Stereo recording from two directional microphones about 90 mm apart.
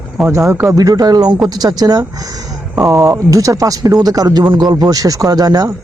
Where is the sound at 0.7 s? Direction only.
45° right (ahead or behind).